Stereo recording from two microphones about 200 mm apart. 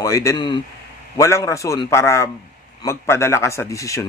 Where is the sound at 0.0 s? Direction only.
15° left (ahead or behind).